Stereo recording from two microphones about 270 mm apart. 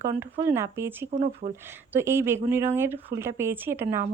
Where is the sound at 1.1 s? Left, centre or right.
Right.